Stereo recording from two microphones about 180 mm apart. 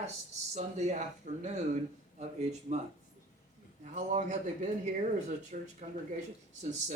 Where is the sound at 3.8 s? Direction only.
40° right (ahead or behind).